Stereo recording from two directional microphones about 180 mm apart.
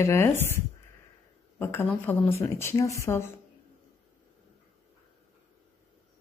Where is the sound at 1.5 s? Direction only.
10° left (ahead or behind).